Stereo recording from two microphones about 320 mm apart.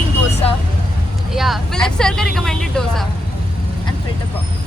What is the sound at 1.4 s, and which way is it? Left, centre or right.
Vehicle, centre.